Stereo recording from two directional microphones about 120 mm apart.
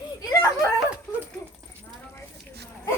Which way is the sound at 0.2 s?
25° left (ahead or behind).